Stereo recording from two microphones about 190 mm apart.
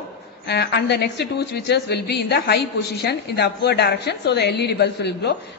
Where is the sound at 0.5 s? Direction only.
60° left (ahead or behind).